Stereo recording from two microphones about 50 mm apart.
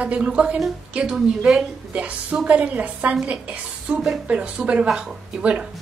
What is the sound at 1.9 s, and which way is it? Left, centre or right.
Speech, right.